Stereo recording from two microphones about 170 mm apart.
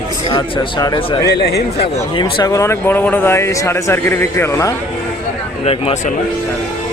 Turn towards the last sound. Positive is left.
turn(degrees=35)  # may be behind; listen again after turning